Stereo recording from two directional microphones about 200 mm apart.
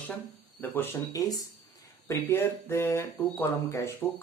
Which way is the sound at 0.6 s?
10° left (ahead or behind).